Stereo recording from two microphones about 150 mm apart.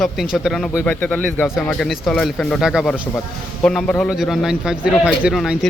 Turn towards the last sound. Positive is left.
turn(degrees=-5)  # may be behind; listen again after turning